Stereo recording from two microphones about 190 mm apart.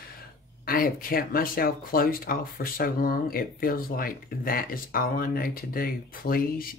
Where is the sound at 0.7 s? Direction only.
50° left (ahead or behind).